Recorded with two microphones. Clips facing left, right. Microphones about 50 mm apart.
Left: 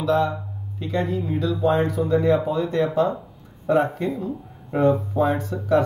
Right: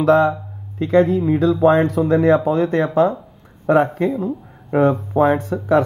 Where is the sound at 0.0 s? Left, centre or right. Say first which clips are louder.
Right 7 dB; right.